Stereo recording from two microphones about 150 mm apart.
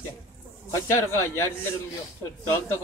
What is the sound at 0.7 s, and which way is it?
A man's voice, 15° left (ahead or behind).